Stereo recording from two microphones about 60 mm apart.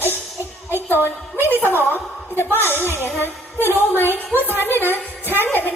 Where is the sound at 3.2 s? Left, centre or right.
Right.